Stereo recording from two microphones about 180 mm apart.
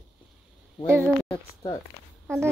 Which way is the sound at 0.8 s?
15° right (ahead or behind).